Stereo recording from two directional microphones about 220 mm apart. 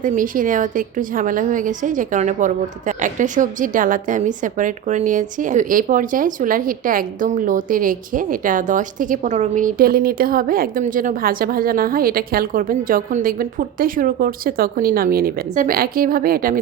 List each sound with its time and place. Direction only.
0.0 s a woman's voice: 35° right (ahead or behind)